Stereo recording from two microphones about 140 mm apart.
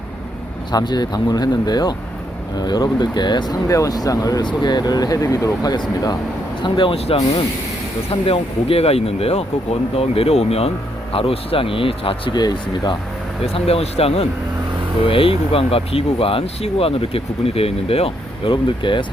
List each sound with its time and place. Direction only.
0.7 s speech: 30° left (ahead or behind)
13.4 s speech: 45° left (ahead or behind)